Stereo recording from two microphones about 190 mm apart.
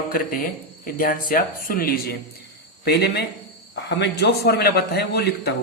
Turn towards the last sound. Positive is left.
turn(degrees=60)  # may be behind; listen again after turning